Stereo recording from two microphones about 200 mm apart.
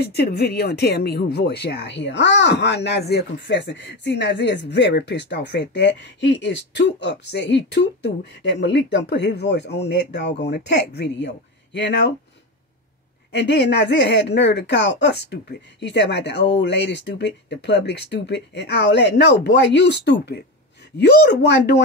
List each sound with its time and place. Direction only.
0.0 s speech: 55° left (ahead or behind)
13.4 s speech: 60° left (ahead or behind)